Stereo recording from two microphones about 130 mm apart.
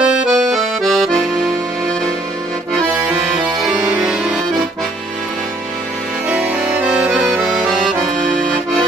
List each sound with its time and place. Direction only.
0.0 s accordion: 5° right (ahead or behind)
4.0 s accordion: 5° right (ahead or behind)
6.2 s music: 10° right (ahead or behind)